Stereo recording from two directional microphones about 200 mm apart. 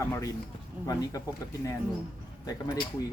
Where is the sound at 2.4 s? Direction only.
20° left (ahead or behind).